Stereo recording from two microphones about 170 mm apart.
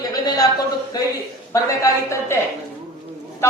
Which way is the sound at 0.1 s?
20° left (ahead or behind).